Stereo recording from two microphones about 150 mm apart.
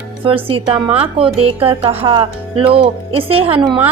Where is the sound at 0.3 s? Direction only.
40° right (ahead or behind).